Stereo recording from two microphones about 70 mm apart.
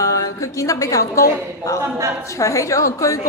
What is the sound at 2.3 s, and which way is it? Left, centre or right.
Speech, left.